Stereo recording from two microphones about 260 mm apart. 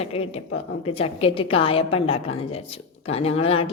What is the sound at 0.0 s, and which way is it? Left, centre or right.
A woman's voice, left.